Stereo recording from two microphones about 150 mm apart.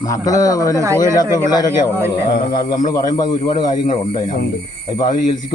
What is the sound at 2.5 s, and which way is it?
A man's voice, 25° left (ahead or behind).